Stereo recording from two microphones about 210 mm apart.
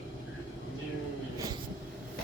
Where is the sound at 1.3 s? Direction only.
15° right (ahead or behind).